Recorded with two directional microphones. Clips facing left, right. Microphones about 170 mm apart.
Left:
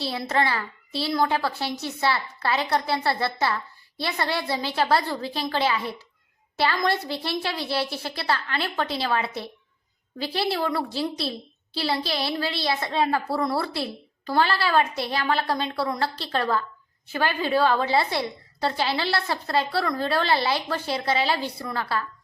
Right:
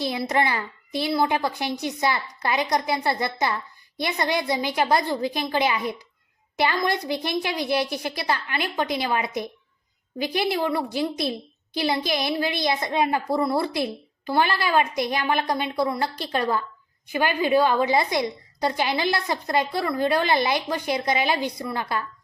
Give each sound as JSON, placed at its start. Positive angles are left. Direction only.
{"t": 0.0, "sound": "a child's voice", "side_deg": -15}